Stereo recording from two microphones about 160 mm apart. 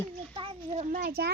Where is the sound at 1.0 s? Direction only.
85° right.